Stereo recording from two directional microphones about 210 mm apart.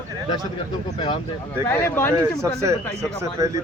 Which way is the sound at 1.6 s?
10° left (ahead or behind).